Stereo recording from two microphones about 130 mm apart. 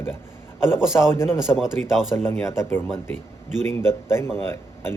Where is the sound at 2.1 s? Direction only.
20° left (ahead or behind).